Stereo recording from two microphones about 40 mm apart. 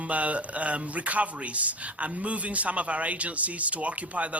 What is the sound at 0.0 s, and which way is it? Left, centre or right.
Speech, right.